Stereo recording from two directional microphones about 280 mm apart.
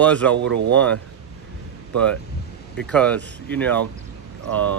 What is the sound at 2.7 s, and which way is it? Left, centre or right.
Speech, centre.